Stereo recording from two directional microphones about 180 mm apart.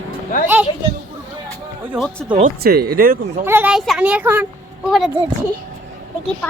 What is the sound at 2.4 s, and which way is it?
Speech, 60° right (ahead or behind).